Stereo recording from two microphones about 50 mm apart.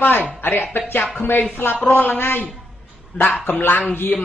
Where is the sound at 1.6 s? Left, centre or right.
Left.